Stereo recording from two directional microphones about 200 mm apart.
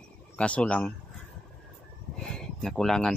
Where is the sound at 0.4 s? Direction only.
5° left (ahead or behind).